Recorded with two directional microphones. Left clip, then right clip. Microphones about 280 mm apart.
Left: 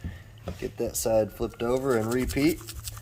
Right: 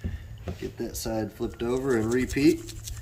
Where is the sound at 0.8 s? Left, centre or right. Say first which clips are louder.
Left 8 dB; left.